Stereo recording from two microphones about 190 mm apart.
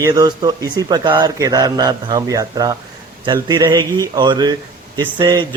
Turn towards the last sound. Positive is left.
turn(degrees=-20)  # may be behind; listen again after turning